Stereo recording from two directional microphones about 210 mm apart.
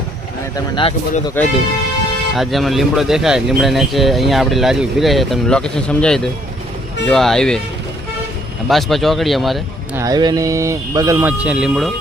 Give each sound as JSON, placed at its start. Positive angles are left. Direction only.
{"t": 0.5, "sound": "speech", "side_deg": 25}
{"t": 1.4, "sound": "speech", "side_deg": 10}
{"t": 8.7, "sound": "speech", "side_deg": 0}
{"t": 9.9, "sound": "speech", "side_deg": -15}